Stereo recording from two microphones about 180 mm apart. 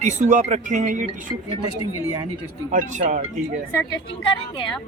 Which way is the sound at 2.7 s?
45° right (ahead or behind).